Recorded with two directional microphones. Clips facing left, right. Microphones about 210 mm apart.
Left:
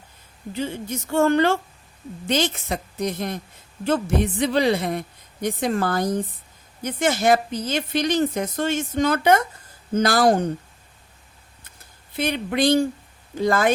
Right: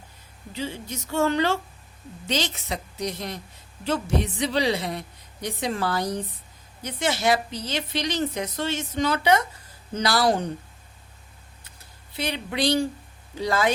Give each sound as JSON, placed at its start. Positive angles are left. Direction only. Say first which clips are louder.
{"t": 0.5, "sound": "a woman's voice", "louder": "left 4 dB", "side_deg": 50}
{"t": 12.1, "sound": "a woman's voice", "louder": "left 5 dB", "side_deg": 50}